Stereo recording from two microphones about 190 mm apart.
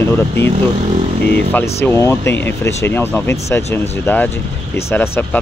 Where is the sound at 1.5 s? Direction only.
10° left (ahead or behind).